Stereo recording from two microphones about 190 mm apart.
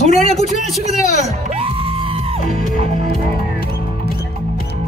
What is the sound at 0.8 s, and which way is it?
Music, 35° right (ahead or behind).